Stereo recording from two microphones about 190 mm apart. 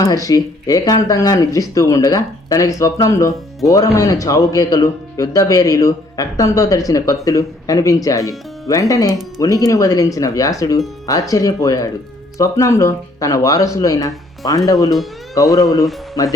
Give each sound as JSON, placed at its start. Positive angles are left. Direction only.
{"t": 0.0, "sound": "speech", "side_deg": 20}